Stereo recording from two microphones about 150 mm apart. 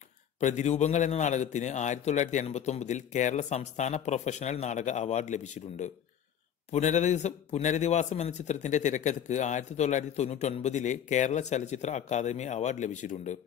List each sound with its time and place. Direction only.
0.4 s a man's voice: 50° left (ahead or behind)